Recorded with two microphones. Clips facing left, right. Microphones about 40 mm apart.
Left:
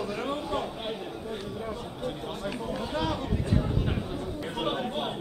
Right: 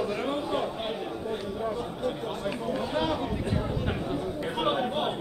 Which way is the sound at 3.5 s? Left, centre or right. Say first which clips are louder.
Left 1 dB; centre.